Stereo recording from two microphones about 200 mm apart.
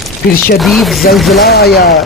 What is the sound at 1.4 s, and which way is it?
Speech, 55° left (ahead or behind).